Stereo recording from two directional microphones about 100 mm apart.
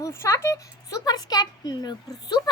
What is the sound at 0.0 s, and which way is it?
A child's voice, 30° left (ahead or behind).